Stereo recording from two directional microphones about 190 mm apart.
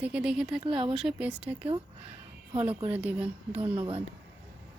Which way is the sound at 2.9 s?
5° right (ahead or behind).